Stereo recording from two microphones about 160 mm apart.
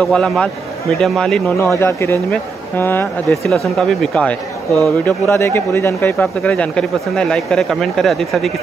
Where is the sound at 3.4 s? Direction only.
Centre (ahead or behind).